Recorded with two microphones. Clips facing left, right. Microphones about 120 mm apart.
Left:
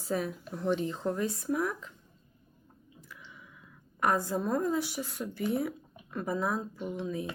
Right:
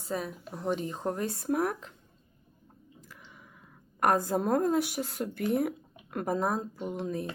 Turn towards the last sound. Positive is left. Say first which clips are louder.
# right 1 dB
turn(degrees=-40)  # may be behind; listen again after turning